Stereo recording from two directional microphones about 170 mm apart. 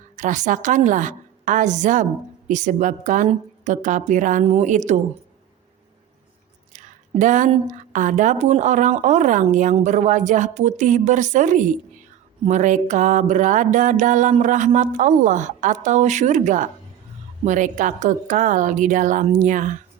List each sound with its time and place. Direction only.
0.2 s a woman's voice: 45° right (ahead or behind)
6.7 s a woman's voice: 45° right (ahead or behind)